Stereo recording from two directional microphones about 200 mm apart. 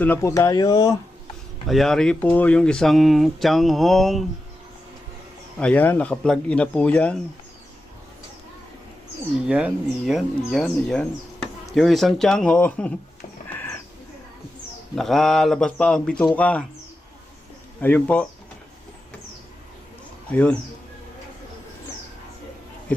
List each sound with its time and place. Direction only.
0.0 s speech: 10° left (ahead or behind)
1.6 s speech: centre (ahead or behind)
5.5 s speech: 5° left (ahead or behind)
9.5 s speech: 5° right (ahead or behind)
14.9 s speech: centre (ahead or behind)
17.7 s speech: 5° left (ahead or behind)
20.3 s speech: 5° left (ahead or behind)